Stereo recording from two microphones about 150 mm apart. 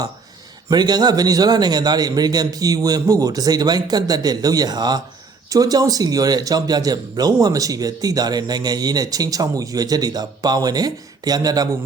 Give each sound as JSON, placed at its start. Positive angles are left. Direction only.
{"t": 0.7, "sound": "speech", "side_deg": -25}